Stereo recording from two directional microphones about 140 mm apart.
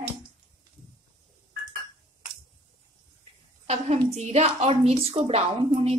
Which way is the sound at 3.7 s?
50° right (ahead or behind).